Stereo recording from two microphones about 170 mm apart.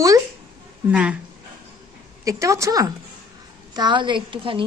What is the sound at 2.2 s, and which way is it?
A woman's voice, 20° right (ahead or behind).